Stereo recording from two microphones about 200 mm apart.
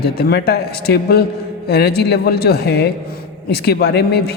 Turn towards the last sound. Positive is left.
turn(degrees=55)  # may be behind; listen again after turning